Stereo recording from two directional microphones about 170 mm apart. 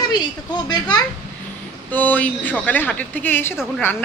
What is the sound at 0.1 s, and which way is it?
Speech, 25° left (ahead or behind).